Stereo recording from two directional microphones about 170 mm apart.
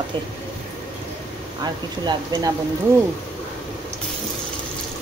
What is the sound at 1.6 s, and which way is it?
Speech, 25° right (ahead or behind).